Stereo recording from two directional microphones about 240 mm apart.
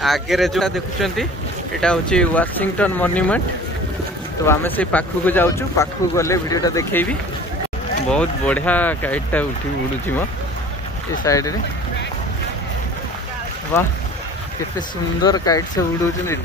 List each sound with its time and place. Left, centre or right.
0.0 s speech: centre
4.5 s speech: centre
11.2 s speech: centre
15.2 s speech: centre